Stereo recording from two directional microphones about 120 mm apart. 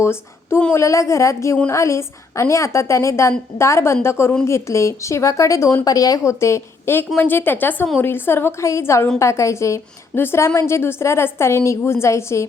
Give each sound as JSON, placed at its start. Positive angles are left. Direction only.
{"t": 0.0, "sound": "a woman's voice", "side_deg": 20}